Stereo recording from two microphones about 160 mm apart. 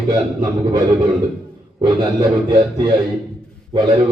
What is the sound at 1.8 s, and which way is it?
A man's voice, 30° right (ahead or behind).